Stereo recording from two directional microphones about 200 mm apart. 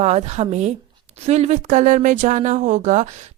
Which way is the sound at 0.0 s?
35° right (ahead or behind).